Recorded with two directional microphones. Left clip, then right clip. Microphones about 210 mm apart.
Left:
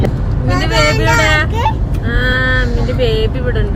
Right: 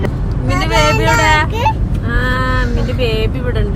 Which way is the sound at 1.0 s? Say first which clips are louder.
Even; 20° right (ahead or behind).